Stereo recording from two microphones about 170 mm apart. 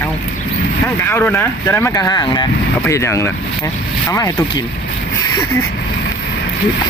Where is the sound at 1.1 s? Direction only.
10° left (ahead or behind).